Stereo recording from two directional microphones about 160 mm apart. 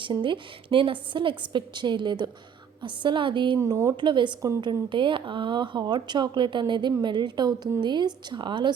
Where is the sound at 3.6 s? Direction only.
20° right (ahead or behind).